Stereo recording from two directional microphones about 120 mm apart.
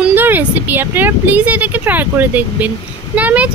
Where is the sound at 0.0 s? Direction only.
15° right (ahead or behind).